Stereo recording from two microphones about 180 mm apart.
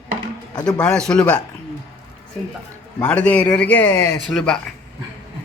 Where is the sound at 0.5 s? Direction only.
20° left (ahead or behind).